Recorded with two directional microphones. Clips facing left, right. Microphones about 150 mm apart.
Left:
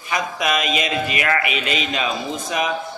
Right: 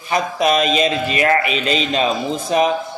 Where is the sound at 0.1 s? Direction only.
30° right (ahead or behind).